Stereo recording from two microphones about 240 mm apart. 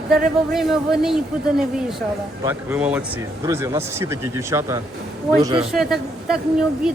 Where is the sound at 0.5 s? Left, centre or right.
Centre.